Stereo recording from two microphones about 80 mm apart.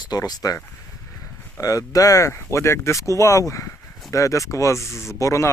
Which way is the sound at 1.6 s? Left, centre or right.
Left.